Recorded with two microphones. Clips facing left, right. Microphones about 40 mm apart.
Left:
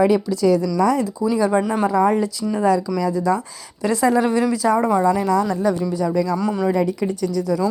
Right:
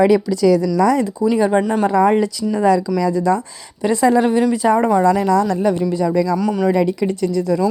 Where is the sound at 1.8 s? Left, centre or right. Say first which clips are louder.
Right 4 dB; right.